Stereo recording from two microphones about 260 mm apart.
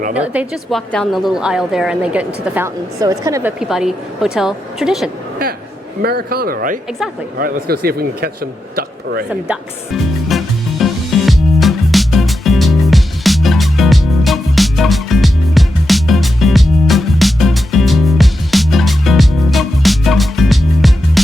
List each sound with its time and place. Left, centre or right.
0.1 s a woman's voice: centre
6.0 s a man's voice: right
9.3 s music: centre